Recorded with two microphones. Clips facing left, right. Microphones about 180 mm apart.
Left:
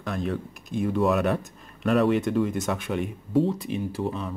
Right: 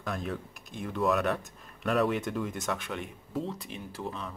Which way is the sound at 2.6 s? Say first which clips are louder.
Left 7 dB; 10° left (ahead or behind).